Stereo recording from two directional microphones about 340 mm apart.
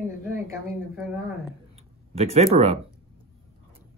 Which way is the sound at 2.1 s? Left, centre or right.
Centre.